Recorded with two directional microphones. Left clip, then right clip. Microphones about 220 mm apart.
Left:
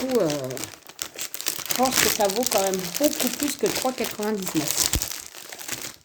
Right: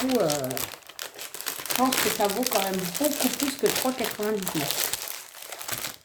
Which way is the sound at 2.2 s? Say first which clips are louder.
Left 1 dB; 45° left (ahead or behind).